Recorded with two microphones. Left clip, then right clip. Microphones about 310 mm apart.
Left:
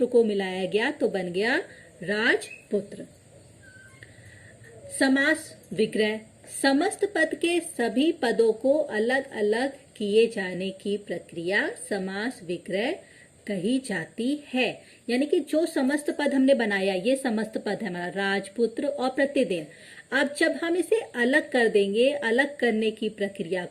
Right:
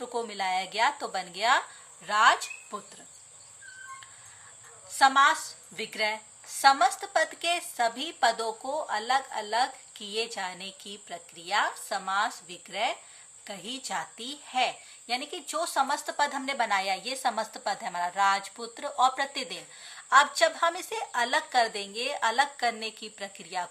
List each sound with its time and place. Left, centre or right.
0.2 s a woman's voice: centre
4.9 s a woman's voice: centre